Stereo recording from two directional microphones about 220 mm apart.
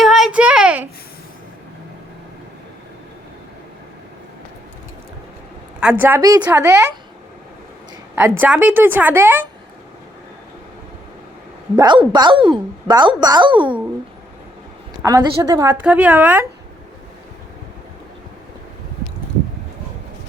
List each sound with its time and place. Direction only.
0.0 s a sound: centre (ahead or behind)
5.8 s a woman's voice: 5° right (ahead or behind)
8.1 s a woman's voice: 10° right (ahead or behind)
11.8 s a woman's voice: 20° right (ahead or behind)
15.0 s a woman's voice: 15° right (ahead or behind)